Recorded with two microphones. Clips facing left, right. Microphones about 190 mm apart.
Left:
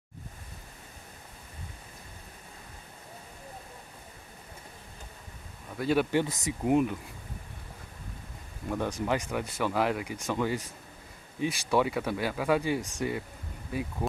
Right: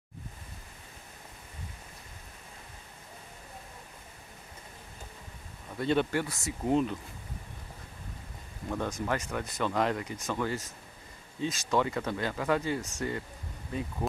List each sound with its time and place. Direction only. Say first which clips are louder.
5.8 s speech: left 1 dB; 5° left (ahead or behind)
6.1 s speech: left 4 dB; 20° left (ahead or behind)
8.6 s speech: left 2 dB; 10° left (ahead or behind)